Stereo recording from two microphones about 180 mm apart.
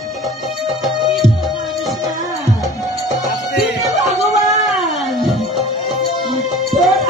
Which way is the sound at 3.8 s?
Centre (ahead or behind).